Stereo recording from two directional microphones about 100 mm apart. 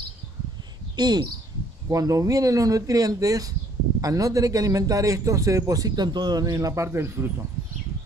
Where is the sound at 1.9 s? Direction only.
35° right (ahead or behind).